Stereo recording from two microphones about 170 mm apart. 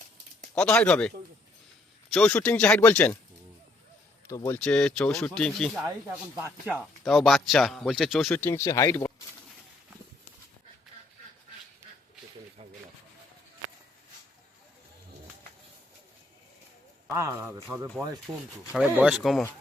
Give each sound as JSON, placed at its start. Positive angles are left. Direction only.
{"t": 0.5, "sound": "speech", "side_deg": 5}
{"t": 2.1, "sound": "speech", "side_deg": 5}
{"t": 4.3, "sound": "speech", "side_deg": 15}
{"t": 6.3, "sound": "speech", "side_deg": -15}
{"t": 7.0, "sound": "speech", "side_deg": 0}
{"t": 8.3, "sound": "speech", "side_deg": 15}
{"t": 17.1, "sound": "a man's voice", "side_deg": -15}